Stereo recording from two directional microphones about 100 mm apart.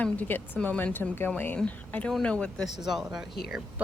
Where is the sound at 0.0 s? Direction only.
15° left (ahead or behind).